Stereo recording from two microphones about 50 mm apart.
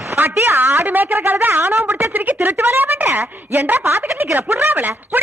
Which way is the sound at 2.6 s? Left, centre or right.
Right.